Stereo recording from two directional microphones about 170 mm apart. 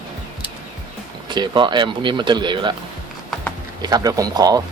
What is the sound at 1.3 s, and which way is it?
Speech, 25° right (ahead or behind).